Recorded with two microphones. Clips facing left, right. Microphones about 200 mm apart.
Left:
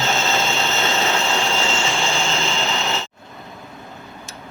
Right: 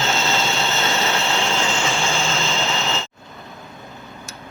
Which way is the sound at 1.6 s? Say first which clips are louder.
Even; 15° right (ahead or behind).